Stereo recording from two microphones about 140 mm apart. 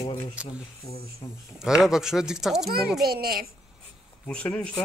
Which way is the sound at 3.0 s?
90° right.